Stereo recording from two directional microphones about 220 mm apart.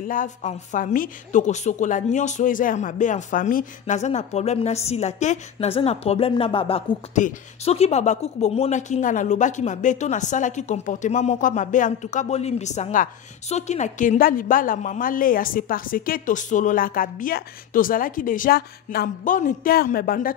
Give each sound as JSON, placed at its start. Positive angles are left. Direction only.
{"t": 0.0, "sound": "a woman's voice", "side_deg": 40}